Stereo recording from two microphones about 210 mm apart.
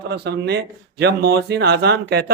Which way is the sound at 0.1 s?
50° right (ahead or behind).